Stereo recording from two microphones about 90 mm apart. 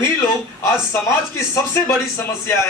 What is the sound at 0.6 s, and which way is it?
Speech, 35° left (ahead or behind).